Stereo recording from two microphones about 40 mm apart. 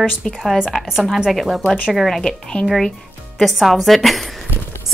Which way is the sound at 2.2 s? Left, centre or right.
Centre.